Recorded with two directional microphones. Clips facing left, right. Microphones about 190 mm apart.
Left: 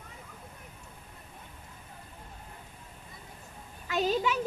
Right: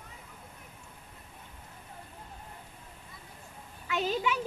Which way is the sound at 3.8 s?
40° left (ahead or behind).